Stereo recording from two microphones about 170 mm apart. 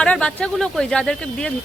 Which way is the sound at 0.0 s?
5° left (ahead or behind).